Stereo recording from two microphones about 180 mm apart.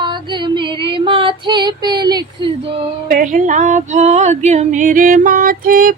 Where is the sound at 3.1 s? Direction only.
45° right (ahead or behind).